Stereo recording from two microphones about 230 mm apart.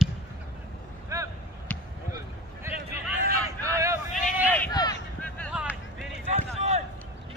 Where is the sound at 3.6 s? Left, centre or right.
Centre.